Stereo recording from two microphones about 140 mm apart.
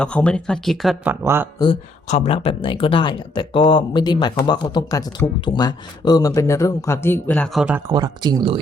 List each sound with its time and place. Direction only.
0.0 s speech: 10° left (ahead or behind)
1.2 s speech: 15° right (ahead or behind)
1.5 s speech: 35° left (ahead or behind)
2.0 s speech: 50° left (ahead or behind); by 7.8 s 5° right (ahead or behind)
7.9 s speech: 30° right (ahead or behind)